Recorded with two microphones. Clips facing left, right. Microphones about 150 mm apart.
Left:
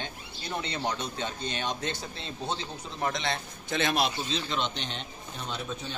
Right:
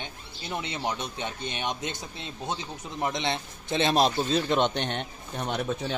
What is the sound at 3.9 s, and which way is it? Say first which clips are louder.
Speech: right 6 dB; 45° right (ahead or behind).